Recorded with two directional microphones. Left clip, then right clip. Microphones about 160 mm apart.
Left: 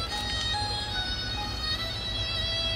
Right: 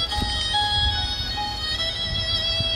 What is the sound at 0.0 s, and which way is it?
Music, 45° right (ahead or behind).